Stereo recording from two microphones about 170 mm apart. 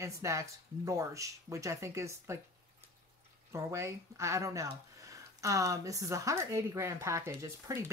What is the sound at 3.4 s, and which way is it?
Speech, 15° right (ahead or behind).